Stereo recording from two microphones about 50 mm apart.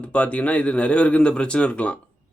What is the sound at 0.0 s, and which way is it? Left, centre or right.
Speech, left.